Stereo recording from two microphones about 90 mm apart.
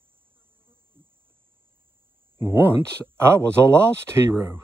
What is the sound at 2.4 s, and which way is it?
Speech, 25° right (ahead or behind).